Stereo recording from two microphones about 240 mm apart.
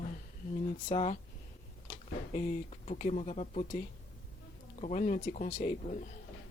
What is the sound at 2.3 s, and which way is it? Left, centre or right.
Speech, left.